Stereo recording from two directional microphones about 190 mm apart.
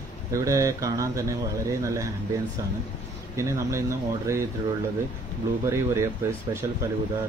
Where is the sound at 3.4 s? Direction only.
15° right (ahead or behind).